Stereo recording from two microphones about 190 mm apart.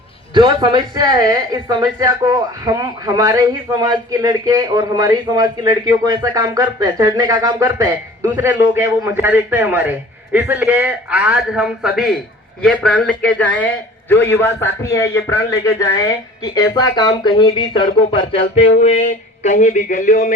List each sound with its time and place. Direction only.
0.3 s a man's voice: 25° right (ahead or behind); by 20.3 s 40° left (ahead or behind)